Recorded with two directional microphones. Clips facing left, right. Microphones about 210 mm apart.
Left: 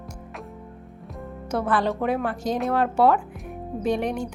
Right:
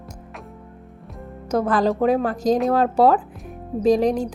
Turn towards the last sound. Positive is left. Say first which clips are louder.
# right 7 dB
turn(degrees=-35)  # may be behind; listen again after turning